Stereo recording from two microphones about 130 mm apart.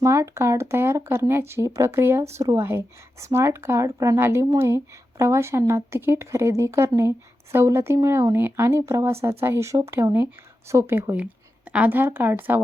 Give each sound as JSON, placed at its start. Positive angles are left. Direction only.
{"t": 0.0, "sound": "a woman's voice", "side_deg": -25}